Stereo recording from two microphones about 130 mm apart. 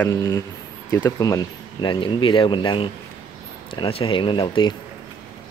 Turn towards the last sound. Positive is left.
turn(degrees=40)  # may be behind; listen again after turning